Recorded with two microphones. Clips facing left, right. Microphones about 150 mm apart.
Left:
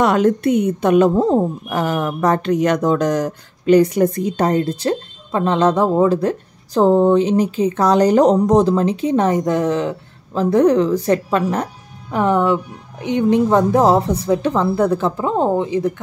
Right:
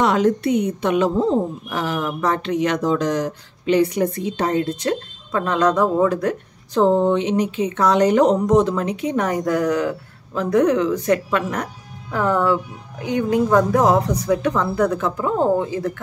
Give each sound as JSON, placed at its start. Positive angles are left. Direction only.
{"t": 0.0, "sound": "a woman's voice", "side_deg": 50}
{"t": 12.1, "sound": "speech", "side_deg": 20}